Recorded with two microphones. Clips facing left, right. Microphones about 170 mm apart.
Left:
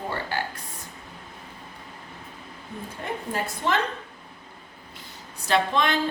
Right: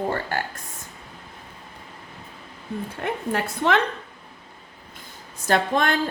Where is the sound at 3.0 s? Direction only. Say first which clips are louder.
Right 3 dB; 70° right (ahead or behind).